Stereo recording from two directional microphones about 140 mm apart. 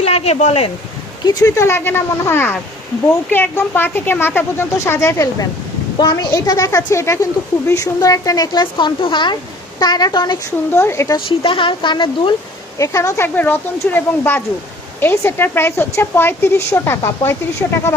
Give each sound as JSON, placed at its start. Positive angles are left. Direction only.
{"t": 0.0, "sound": "speech", "side_deg": 50}
{"t": 1.2, "sound": "a woman's voice", "side_deg": 25}
{"t": 10.8, "sound": "speech", "side_deg": 20}
{"t": 11.3, "sound": "speech", "side_deg": 35}
{"t": 12.8, "sound": "a woman's voice", "side_deg": 20}